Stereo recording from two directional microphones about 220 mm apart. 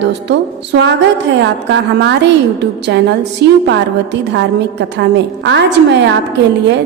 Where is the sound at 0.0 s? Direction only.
50° right (ahead or behind).